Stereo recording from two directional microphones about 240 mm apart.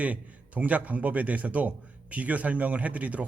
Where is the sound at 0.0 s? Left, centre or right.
Centre.